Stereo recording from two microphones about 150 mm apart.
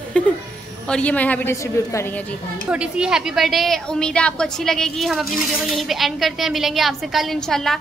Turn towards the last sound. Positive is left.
turn(degrees=5)  # may be behind; listen again after turning